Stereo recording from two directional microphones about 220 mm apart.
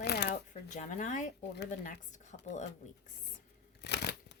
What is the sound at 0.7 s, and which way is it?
Speech, 35° left (ahead or behind).